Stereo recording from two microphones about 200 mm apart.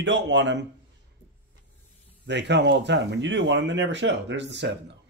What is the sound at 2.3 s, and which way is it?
Speech, 60° right (ahead or behind).